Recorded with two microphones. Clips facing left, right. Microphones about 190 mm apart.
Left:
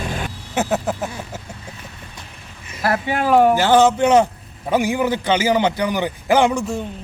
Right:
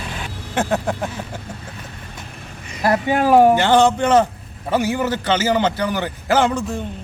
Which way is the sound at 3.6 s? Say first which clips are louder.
Left 1 dB; 5° left (ahead or behind).